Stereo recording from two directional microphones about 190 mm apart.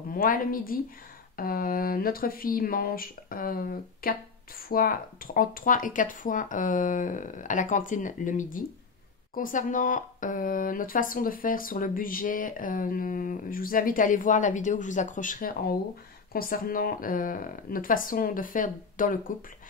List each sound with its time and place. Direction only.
0.1 s speech: 50° left (ahead or behind)